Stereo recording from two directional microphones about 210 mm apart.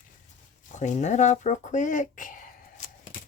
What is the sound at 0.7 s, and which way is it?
Speech, 35° left (ahead or behind).